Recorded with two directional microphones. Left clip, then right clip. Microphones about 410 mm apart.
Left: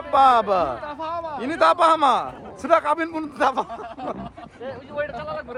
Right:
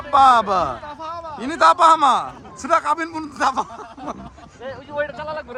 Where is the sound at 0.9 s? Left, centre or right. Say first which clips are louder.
Left 2 dB; centre.